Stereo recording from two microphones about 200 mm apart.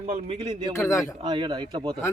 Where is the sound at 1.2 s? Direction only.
25° right (ahead or behind).